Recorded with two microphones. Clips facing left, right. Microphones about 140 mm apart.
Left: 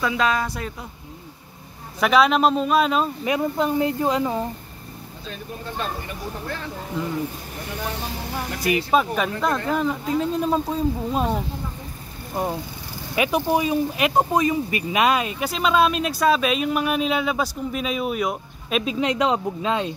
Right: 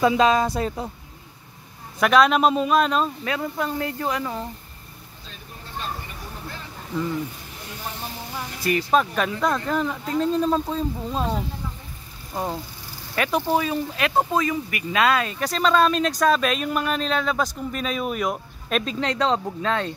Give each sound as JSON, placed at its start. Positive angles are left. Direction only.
{"t": 0.0, "sound": "speech", "side_deg": -25}
{"t": 2.0, "sound": "a man's voice", "side_deg": 0}
{"t": 3.3, "sound": "speech", "side_deg": 20}
{"t": 8.6, "sound": "speech", "side_deg": 10}
{"t": 13.1, "sound": "speech", "side_deg": 10}